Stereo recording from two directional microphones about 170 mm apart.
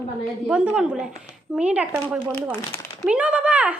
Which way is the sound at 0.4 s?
5° right (ahead or behind).